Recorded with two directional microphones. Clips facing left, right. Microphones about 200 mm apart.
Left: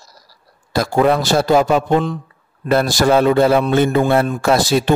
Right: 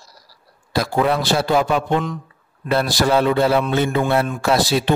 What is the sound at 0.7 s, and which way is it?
Speech, 45° left (ahead or behind).